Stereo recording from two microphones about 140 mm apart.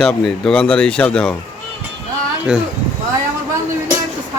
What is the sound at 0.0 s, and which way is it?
Speech, 5° left (ahead or behind).